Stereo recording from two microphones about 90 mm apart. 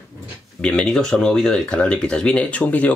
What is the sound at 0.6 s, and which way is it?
Speech, 10° left (ahead or behind).